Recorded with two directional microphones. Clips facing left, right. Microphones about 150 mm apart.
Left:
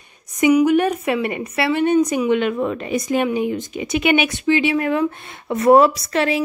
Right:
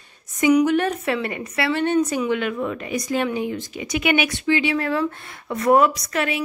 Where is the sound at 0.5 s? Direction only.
10° left (ahead or behind); by 6.4 s 30° left (ahead or behind).